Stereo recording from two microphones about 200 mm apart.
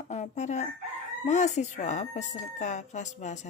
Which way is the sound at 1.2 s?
35° left (ahead or behind).